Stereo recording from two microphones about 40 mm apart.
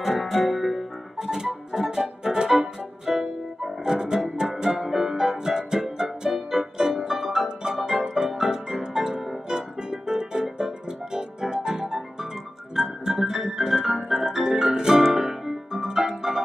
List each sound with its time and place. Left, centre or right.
0.0 s music: centre
1.2 s music: centre
15.1 s harp: centre